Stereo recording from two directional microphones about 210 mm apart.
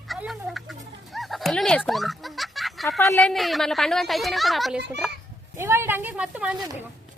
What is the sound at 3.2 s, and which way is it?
A woman's voice, centre (ahead or behind).